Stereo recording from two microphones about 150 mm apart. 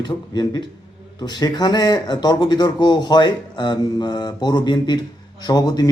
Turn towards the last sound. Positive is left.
turn(degrees=25)  # may be behind; listen again after turning